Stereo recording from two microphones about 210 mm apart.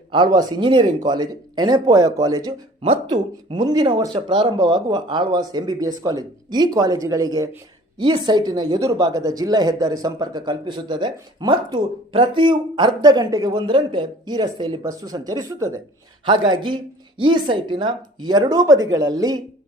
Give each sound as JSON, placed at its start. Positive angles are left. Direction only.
{"t": 0.1, "sound": "a woman's voice", "side_deg": -20}